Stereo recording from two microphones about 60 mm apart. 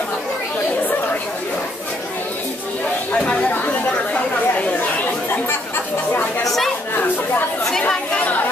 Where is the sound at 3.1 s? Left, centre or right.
Centre.